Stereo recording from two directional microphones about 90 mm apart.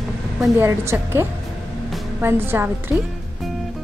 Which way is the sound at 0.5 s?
30° right (ahead or behind).